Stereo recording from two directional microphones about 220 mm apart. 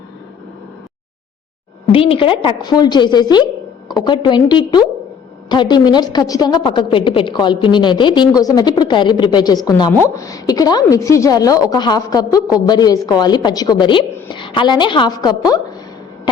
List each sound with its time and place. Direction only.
1.9 s a woman's voice: 25° left (ahead or behind)